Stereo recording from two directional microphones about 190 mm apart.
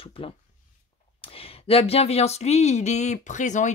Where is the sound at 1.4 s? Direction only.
30° left (ahead or behind).